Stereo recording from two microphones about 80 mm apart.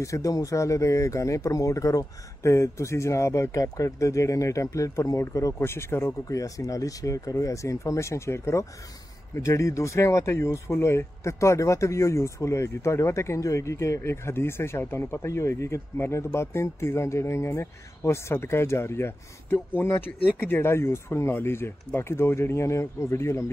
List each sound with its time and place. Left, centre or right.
0.0 s speech: left
5.6 s speech: left
6.0 s speech: left